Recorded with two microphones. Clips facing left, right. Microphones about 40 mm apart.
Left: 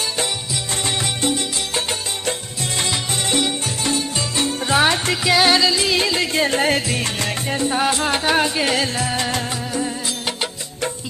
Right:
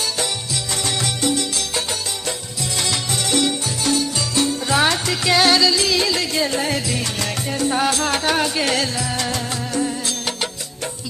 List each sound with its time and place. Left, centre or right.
0.8 s music: left
5.1 s music: centre
6.3 s music: left
7.9 s music: centre
8.8 s music: left
9.5 s music: centre